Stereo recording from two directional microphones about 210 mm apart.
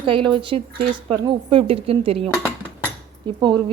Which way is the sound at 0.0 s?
25° right (ahead or behind).